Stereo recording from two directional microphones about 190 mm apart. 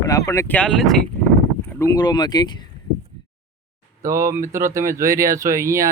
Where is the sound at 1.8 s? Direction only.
20° left (ahead or behind).